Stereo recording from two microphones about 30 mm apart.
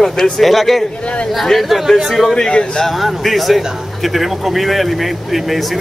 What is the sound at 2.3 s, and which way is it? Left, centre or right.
Speech, left.